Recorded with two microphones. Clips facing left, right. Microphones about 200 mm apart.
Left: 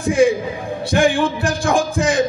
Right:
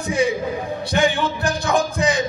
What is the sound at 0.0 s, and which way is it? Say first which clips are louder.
Speech: left 6 dB; 50° left (ahead or behind).